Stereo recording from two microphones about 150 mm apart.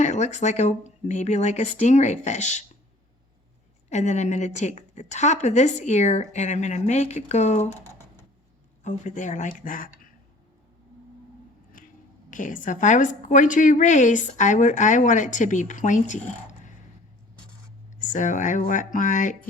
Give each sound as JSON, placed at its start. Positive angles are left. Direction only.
{"t": 0.0, "sound": "a woman's voice", "side_deg": 50}
{"t": 3.8, "sound": "a woman's voice", "side_deg": 50}
{"t": 8.8, "sound": "a woman's voice", "side_deg": 55}
{"t": 12.3, "sound": "a woman's voice", "side_deg": 60}
{"t": 18.0, "sound": "a woman's voice", "side_deg": 55}